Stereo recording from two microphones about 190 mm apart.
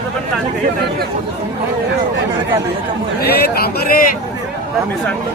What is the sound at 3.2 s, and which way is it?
Speech, 55° left (ahead or behind).